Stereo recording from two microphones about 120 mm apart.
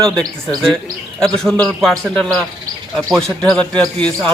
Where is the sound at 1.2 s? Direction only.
5° left (ahead or behind).